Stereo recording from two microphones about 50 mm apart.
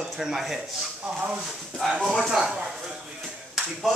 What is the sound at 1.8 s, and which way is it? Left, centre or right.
Speech, centre.